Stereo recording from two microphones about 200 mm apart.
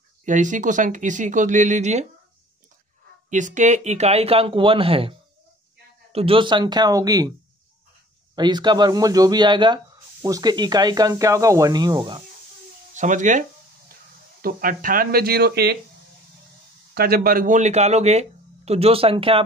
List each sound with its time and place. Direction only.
0.2 s speech: 40° right (ahead or behind)
3.3 s speech: 40° right (ahead or behind)
6.1 s speech: 25° right (ahead or behind)
8.4 s speech: 20° right (ahead or behind)
12.9 s speech: 40° right (ahead or behind); by 15.8 s 55° right (ahead or behind)
16.9 s speech: 50° right (ahead or behind); by 19.4 s 25° right (ahead or behind)